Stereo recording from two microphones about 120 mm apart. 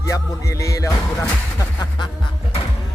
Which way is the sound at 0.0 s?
25° left (ahead or behind).